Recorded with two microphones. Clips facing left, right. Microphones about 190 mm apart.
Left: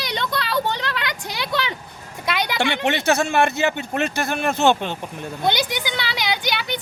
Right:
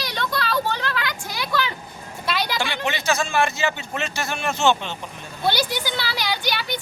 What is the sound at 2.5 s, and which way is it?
Speech, 65° left (ahead or behind).